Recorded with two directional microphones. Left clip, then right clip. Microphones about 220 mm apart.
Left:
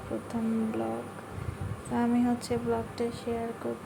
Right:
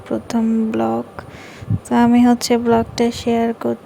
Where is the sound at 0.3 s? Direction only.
40° right (ahead or behind).